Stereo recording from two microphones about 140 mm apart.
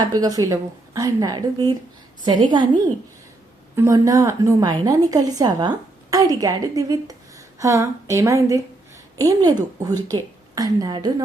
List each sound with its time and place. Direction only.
0.0 s a woman's voice: 25° right (ahead or behind)
3.8 s a woman's voice: 20° right (ahead or behind)